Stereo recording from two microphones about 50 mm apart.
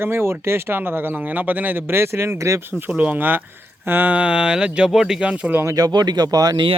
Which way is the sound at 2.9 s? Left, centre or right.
Right.